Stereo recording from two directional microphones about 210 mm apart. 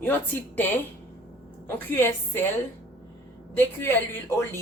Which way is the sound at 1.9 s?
10° left (ahead or behind).